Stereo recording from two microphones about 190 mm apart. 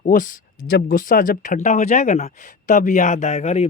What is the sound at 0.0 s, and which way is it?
Speech, 45° left (ahead or behind).